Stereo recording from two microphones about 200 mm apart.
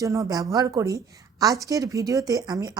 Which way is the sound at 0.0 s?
15° right (ahead or behind).